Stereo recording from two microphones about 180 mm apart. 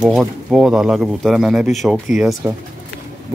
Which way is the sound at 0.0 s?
Centre (ahead or behind).